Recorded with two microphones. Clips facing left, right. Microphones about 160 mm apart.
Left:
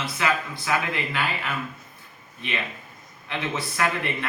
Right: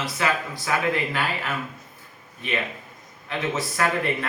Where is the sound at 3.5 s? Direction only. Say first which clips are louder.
Right 1 dB; 40° right (ahead or behind).